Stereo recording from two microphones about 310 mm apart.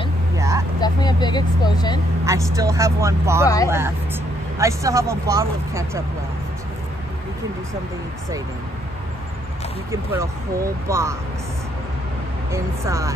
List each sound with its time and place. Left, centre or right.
0.4 s vehicle: centre
0.7 s speech: centre
2.2 s speech: centre
3.4 s speech: centre
3.7 s speech: centre
9.8 s speech: centre
12.4 s speech: centre